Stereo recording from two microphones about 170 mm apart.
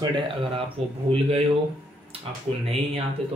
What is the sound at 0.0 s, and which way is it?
Speech, 25° right (ahead or behind).